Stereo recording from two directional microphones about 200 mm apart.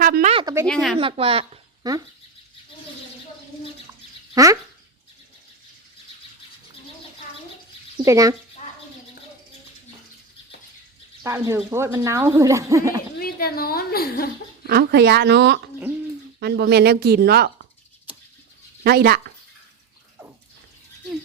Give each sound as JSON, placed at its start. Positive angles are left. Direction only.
{"t": 0.0, "sound": "a sound", "side_deg": -40}
{"t": 0.3, "sound": "speech", "side_deg": -20}
{"t": 0.7, "sound": "speech", "side_deg": 0}
{"t": 0.9, "sound": "a woman's voice", "side_deg": -30}
{"t": 4.4, "sound": "speech", "side_deg": -15}
{"t": 8.0, "sound": "speech", "side_deg": -15}
{"t": 11.2, "sound": "speech", "side_deg": -15}
{"t": 13.1, "sound": "a woman's voice", "side_deg": 50}
{"t": 14.7, "sound": "speech", "side_deg": -55}
{"t": 18.8, "sound": "speech", "side_deg": -50}